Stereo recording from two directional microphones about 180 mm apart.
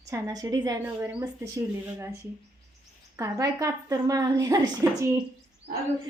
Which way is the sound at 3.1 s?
15° right (ahead or behind).